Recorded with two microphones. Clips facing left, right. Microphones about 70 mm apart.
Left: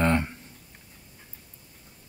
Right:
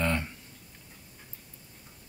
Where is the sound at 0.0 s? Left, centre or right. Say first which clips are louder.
Left 6 dB; left.